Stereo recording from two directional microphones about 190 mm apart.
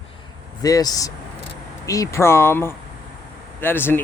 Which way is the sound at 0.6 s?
20° left (ahead or behind).